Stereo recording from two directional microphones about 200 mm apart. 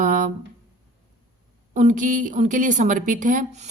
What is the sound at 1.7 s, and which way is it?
A woman's voice, 40° right (ahead or behind).